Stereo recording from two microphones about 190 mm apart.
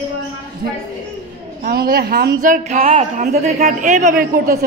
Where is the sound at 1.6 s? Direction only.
55° right (ahead or behind).